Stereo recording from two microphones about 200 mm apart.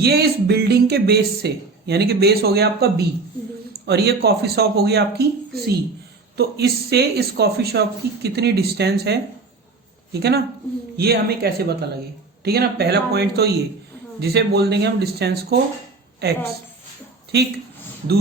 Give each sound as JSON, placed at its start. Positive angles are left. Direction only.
{"t": 0.0, "sound": "speech", "side_deg": -55}